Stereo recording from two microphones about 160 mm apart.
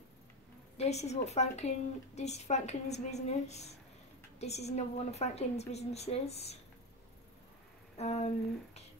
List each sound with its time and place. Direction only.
0.7 s a woman's voice: 45° left (ahead or behind)
8.0 s a woman's voice: 40° left (ahead or behind)